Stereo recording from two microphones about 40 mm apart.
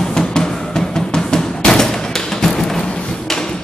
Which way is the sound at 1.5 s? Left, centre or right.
Centre.